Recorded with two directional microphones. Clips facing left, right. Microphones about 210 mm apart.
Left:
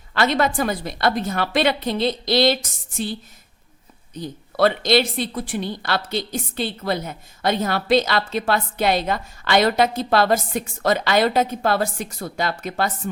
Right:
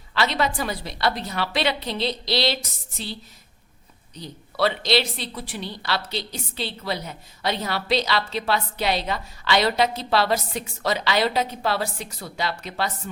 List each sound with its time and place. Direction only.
0.1 s a woman's voice: 50° left (ahead or behind)